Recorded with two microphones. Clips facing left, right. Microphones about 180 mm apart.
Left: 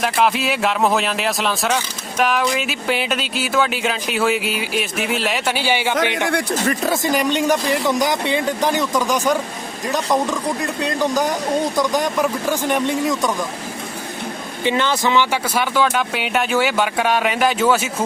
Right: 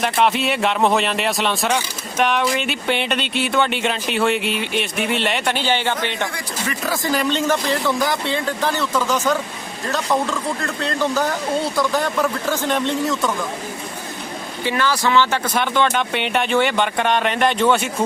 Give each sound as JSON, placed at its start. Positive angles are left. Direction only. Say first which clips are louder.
{"t": 0.0, "sound": "speech", "louder": "even", "side_deg": 0}
{"t": 6.8, "sound": "speech", "louder": "right 1 dB", "side_deg": 25}
{"t": 14.6, "sound": "speech", "louder": "left 2 dB", "side_deg": 20}